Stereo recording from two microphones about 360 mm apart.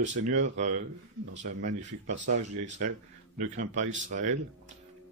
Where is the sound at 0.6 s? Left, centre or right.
Right.